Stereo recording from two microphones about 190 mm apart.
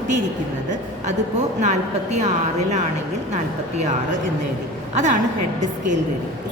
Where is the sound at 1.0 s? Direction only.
40° right (ahead or behind).